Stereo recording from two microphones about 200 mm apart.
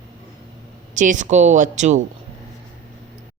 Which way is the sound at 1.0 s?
40° right (ahead or behind).